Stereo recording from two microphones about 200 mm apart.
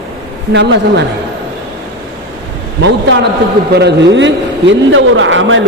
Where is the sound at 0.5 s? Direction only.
60° right (ahead or behind).